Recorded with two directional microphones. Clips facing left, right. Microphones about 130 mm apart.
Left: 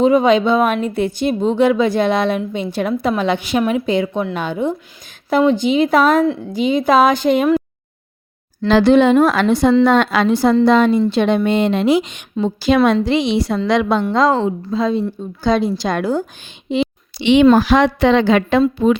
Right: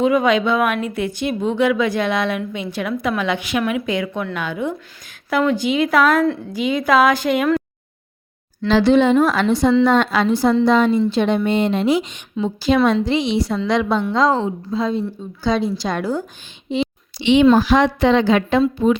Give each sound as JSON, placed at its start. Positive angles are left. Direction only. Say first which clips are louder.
{"t": 0.0, "sound": "a woman's voice", "louder": "left 4 dB", "side_deg": 30}
{"t": 8.6, "sound": "a woman's voice", "louder": "left 3 dB", "side_deg": 55}
{"t": 14.0, "sound": "a woman's voice", "louder": "left 2 dB", "side_deg": 60}
{"t": 15.4, "sound": "a woman's voice", "louder": "left 3 dB", "side_deg": 55}